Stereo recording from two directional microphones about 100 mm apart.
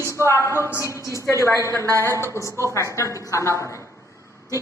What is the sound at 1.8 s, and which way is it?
Speech, 30° right (ahead or behind).